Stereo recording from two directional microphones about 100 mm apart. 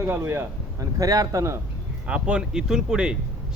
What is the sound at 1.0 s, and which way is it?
Speech, 35° right (ahead or behind).